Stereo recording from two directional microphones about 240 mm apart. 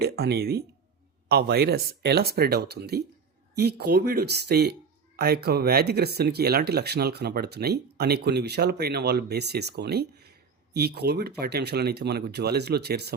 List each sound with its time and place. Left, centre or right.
0.0 s speech: right